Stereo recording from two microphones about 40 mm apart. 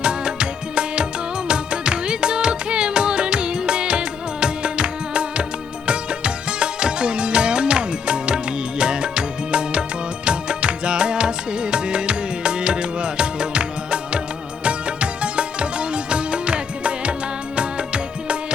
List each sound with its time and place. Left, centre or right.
0.0 s music: right